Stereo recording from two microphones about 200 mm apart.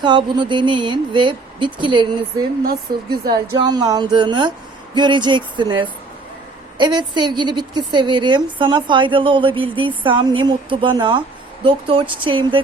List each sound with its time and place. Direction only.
0.0 s a woman's voice: 20° right (ahead or behind)
2.6 s speech: 50° right (ahead or behind)
3.6 s a woman's voice: 20° right (ahead or behind)